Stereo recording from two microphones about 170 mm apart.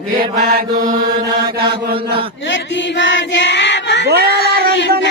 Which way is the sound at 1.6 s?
65° right (ahead or behind).